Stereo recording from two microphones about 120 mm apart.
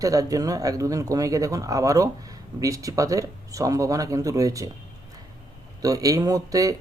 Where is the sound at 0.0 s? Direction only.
30° right (ahead or behind).